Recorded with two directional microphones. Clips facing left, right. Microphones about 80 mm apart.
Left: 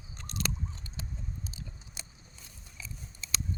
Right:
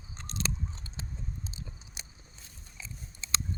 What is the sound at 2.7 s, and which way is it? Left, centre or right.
Biting, right.